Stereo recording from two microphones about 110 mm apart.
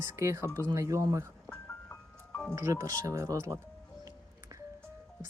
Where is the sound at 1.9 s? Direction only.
20° left (ahead or behind).